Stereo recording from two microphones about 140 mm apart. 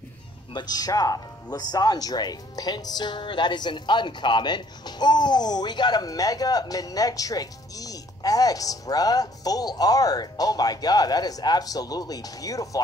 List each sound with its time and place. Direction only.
0.5 s speech: 30° left (ahead or behind)